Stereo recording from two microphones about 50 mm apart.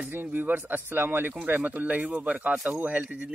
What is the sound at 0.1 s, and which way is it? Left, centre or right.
Speech, right.